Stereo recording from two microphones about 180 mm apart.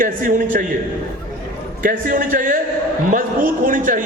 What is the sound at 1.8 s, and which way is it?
Speech, 50° right (ahead or behind).